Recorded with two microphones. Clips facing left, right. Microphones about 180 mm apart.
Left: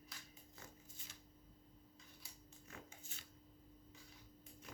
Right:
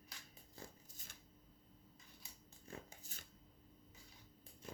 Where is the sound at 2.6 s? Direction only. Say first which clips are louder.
Right 4 dB; 40° right (ahead or behind).